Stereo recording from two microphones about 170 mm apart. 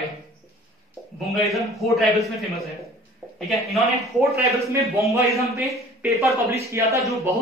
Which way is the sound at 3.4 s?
Centre (ahead or behind).